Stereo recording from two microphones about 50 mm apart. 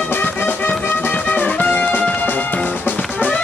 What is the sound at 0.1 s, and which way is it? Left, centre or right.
Music, left.